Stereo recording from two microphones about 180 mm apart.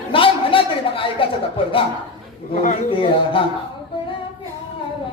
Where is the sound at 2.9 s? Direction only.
30° left (ahead or behind).